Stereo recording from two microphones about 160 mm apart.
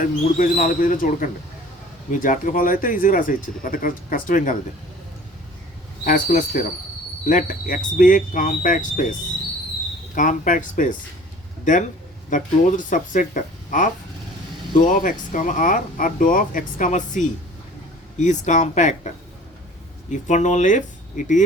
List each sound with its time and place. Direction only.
0.3 s speech: 55° left (ahead or behind)
6.1 s speech: 55° left (ahead or behind)
10.2 s speech: 55° left (ahead or behind)